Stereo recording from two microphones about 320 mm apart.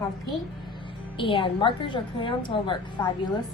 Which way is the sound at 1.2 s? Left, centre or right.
Centre.